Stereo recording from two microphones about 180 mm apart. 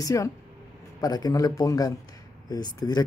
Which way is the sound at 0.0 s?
20° left (ahead or behind).